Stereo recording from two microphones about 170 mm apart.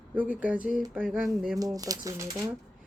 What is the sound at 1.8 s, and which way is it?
Speech, 20° right (ahead or behind).